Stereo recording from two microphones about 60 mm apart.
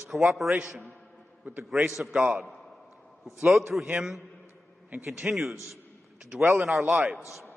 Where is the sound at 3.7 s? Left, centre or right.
Centre.